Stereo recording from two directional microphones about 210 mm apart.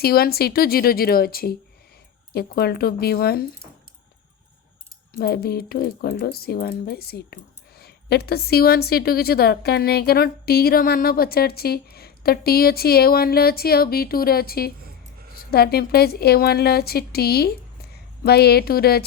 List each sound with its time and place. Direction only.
0.0 s a woman's voice: 45° left (ahead or behind)
5.1 s a woman's voice: 50° left (ahead or behind)